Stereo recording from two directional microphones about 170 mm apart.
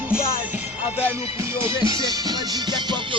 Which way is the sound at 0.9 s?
15° right (ahead or behind).